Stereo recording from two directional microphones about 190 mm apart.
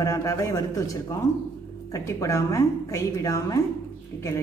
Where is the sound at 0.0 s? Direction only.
15° left (ahead or behind).